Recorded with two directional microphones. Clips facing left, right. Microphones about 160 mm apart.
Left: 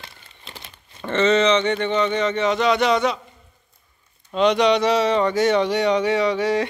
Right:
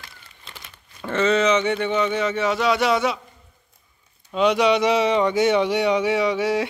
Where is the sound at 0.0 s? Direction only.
25° left (ahead or behind).